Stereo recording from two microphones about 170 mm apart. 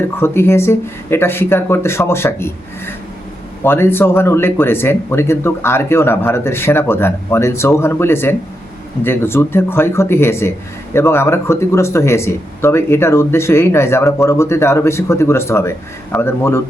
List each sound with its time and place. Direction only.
0.2 s speech: 15° left (ahead or behind)